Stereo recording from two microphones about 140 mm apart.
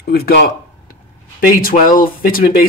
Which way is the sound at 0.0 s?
90° left.